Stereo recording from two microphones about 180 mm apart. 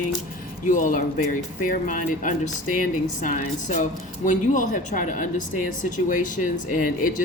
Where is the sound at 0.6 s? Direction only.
45° left (ahead or behind).